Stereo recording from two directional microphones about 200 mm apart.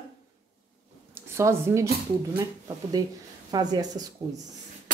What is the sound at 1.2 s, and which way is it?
Speech, 15° right (ahead or behind).